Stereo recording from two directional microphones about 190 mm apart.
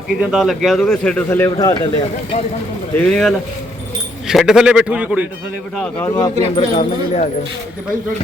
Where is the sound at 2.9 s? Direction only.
5° left (ahead or behind).